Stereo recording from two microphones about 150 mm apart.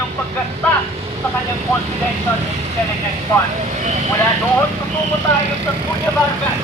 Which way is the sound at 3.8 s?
50° right (ahead or behind).